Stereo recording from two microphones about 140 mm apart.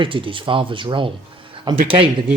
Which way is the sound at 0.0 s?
40° right (ahead or behind).